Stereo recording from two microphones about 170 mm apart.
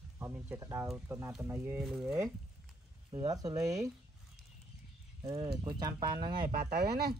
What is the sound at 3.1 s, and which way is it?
Speech, 20° right (ahead or behind).